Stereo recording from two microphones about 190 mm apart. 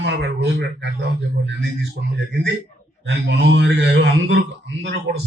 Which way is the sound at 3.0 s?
70° right (ahead or behind).